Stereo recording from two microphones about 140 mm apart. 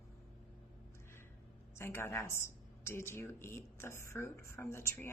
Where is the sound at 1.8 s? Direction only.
15° left (ahead or behind).